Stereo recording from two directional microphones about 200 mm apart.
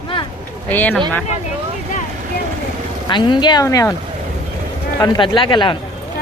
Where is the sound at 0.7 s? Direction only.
10° left (ahead or behind).